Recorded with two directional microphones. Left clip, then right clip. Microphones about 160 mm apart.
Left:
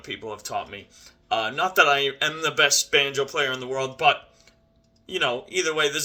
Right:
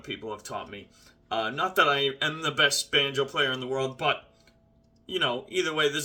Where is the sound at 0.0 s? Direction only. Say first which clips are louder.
Left 2 dB; 15° right (ahead or behind).